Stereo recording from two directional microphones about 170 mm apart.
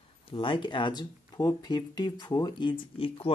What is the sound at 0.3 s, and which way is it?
Speech, 30° left (ahead or behind).